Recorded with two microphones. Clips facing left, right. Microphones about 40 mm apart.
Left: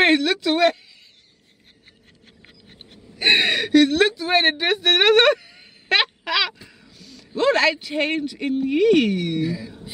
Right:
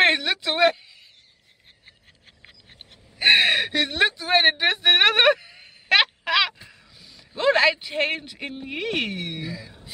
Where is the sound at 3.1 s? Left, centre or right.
Centre.